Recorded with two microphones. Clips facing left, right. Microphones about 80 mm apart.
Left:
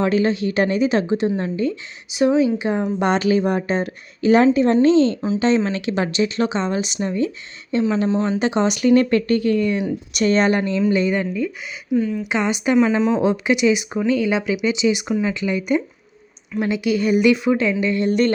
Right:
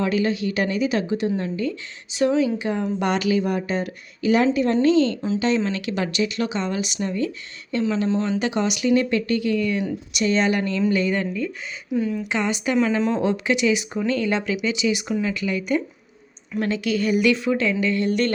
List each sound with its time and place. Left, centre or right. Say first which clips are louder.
0.0 s speech: left 4 dB; left
2.1 s speech: left 3 dB; centre
3.0 s speech: left 4 dB; left
10.1 s speech: left 4 dB; left
10.6 s speech: left 3 dB; left
11.9 s speech: left 4 dB; centre
12.2 s speech: left 3 dB; centre
13.0 s speech: left 4 dB; centre
13.2 s speech: left 3 dB; centre